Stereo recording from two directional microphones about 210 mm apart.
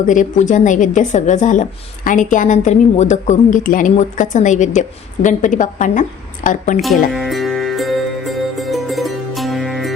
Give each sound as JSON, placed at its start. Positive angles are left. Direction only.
{"t": 0.1, "sound": "a woman's voice", "side_deg": 35}
{"t": 6.8, "sound": "music", "side_deg": 0}